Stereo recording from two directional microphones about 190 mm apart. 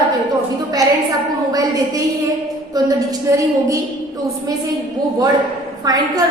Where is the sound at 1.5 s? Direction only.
20° right (ahead or behind).